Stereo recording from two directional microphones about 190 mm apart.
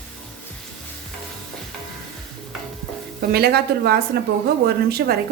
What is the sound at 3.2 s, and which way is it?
A woman's voice, 55° right (ahead or behind).